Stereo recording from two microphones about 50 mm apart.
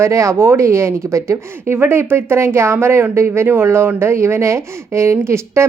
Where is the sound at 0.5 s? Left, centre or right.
Right.